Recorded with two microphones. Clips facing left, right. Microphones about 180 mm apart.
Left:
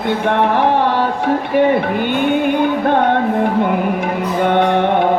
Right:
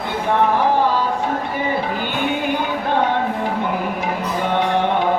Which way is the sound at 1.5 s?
65° left (ahead or behind).